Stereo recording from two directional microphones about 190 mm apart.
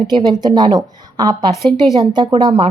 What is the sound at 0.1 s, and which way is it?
Speech, 20° right (ahead or behind).